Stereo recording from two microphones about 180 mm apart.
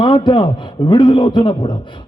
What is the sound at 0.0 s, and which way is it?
A man's voice, 25° left (ahead or behind).